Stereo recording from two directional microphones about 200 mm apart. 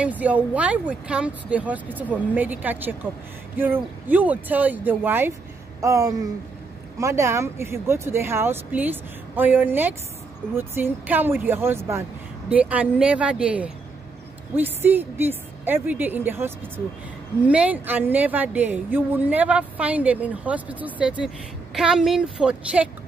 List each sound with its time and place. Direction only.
0.0 s a woman's voice: 5° right (ahead or behind)